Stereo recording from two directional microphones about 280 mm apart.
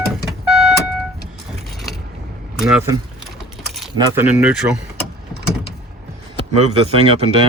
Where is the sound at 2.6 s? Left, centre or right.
Centre.